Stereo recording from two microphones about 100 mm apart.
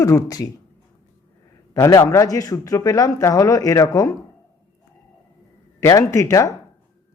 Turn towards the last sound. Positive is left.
turn(degrees=30)  # may be behind; listen again after turning